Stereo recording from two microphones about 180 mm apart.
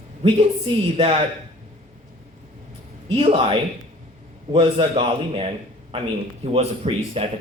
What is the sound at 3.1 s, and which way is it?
A man's voice, 30° right (ahead or behind).